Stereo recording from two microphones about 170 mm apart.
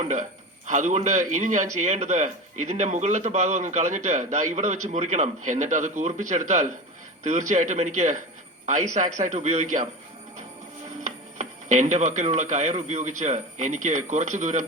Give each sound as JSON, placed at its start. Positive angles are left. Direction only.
{"t": 0.0, "sound": "speech", "side_deg": -45}
{"t": 11.0, "sound": "speech", "side_deg": -45}